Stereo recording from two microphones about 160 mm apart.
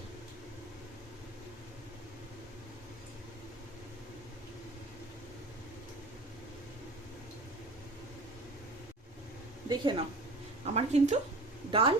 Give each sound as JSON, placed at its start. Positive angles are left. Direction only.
{"t": 9.6, "sound": "speech", "side_deg": -30}
{"t": 10.8, "sound": "speech", "side_deg": -45}
{"t": 11.7, "sound": "speech", "side_deg": -35}